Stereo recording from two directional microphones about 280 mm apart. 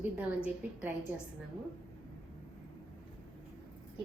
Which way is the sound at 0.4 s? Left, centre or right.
Centre.